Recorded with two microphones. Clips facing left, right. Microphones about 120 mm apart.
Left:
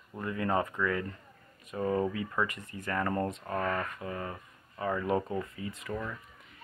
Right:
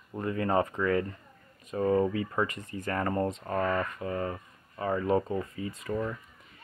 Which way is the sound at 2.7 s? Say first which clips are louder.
Right 2 dB; 45° right (ahead or behind).